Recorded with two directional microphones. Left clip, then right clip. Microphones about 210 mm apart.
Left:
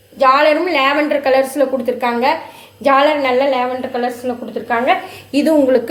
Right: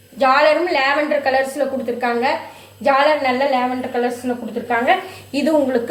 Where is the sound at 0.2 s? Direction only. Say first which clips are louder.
Left 2 dB; 50° left (ahead or behind).